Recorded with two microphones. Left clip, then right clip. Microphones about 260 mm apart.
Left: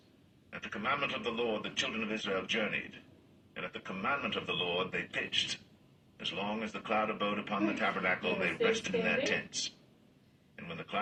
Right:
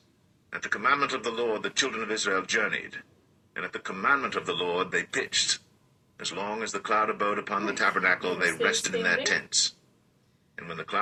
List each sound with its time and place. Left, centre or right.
0.6 s speech: right
10.5 s speech: right